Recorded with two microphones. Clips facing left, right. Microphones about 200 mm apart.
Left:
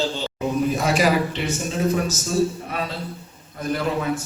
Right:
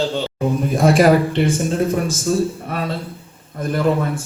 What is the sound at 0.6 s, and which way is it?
A man's voice, 50° right (ahead or behind).